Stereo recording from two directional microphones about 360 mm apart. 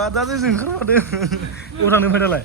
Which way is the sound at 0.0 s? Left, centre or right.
Centre.